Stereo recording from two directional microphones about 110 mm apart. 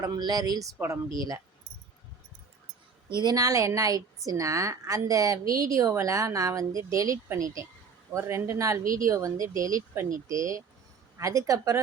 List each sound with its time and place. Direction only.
0.0 s speech: 35° right (ahead or behind)
3.1 s a woman's voice: 40° right (ahead or behind)